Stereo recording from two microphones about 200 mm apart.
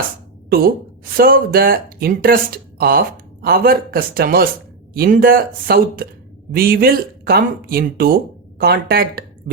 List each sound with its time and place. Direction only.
1.1 s speech: 45° right (ahead or behind)